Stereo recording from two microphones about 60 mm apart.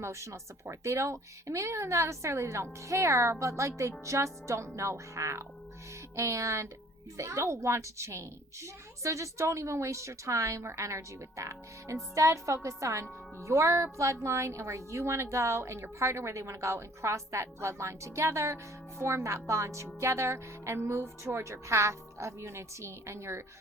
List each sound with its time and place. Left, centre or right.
0.0 s speech: right